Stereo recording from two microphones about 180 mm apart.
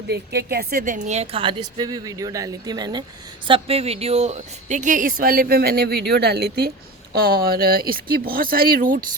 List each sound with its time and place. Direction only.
0.1 s a woman's voice: 65° right (ahead or behind)